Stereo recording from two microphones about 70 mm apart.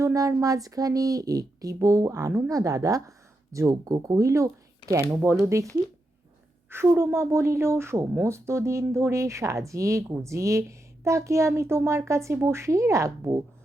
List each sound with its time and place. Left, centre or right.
0.0 s speech: right
6.7 s speech: right